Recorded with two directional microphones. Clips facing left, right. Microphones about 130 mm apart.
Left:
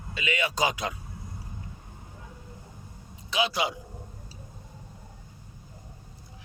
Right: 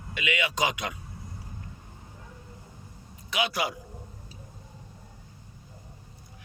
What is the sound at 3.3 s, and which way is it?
Speech, 25° left (ahead or behind).